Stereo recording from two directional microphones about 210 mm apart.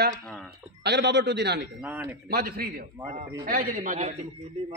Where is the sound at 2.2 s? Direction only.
50° right (ahead or behind).